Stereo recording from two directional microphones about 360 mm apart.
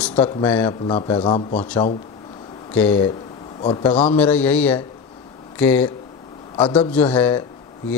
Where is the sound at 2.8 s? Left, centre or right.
Centre.